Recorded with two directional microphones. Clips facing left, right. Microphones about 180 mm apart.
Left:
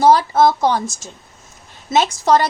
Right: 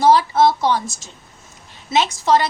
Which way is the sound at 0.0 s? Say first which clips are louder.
Left 1 dB; 45° left (ahead or behind).